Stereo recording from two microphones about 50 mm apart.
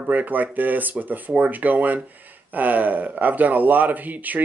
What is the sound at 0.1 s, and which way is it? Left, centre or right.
Speech, right.